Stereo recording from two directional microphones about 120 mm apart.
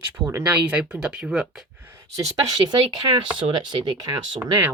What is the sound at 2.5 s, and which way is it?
Speech, 35° right (ahead or behind).